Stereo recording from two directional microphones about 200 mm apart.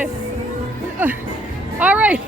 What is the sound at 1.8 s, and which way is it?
Speech, 5° right (ahead or behind).